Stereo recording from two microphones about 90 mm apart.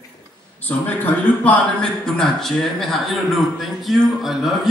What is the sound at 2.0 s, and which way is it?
Speech, 10° left (ahead or behind).